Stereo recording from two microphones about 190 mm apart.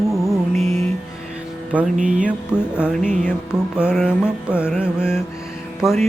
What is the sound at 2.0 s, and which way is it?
Music, 40° right (ahead or behind).